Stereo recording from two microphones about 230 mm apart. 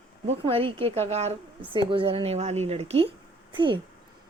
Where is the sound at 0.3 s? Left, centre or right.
Right.